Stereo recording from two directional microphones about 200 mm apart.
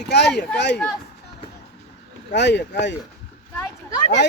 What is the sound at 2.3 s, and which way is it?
Speech, 60° left (ahead or behind).